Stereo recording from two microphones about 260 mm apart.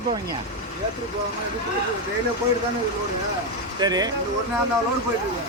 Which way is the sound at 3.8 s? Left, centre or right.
Centre.